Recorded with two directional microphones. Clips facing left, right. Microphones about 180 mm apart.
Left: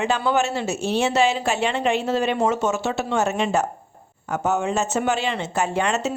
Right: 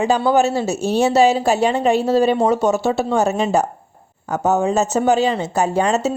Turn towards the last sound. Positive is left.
turn(degrees=-35)  # may be behind; listen again after turning